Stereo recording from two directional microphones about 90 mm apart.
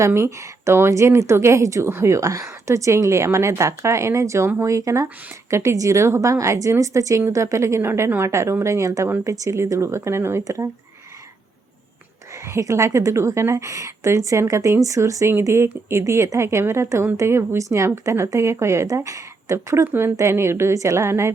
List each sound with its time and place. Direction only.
0.0 s a woman's voice: 30° right (ahead or behind)
12.5 s a woman's voice: 35° right (ahead or behind)